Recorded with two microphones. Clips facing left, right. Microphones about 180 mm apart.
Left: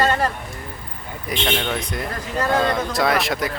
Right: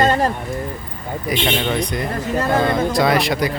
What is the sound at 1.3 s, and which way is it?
Speech, 5° right (ahead or behind).